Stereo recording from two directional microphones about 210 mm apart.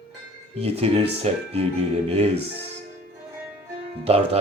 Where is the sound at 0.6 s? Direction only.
30° right (ahead or behind).